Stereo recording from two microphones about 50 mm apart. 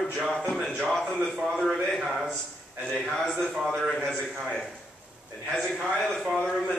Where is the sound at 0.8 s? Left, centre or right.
Centre.